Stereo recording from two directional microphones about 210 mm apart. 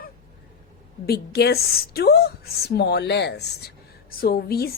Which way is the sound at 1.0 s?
50° left (ahead or behind).